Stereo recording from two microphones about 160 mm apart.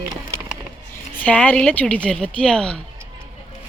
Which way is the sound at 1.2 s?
10° left (ahead or behind).